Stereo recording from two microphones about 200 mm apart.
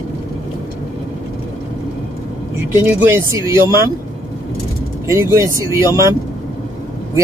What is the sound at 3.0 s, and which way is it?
Speech, 10° right (ahead or behind).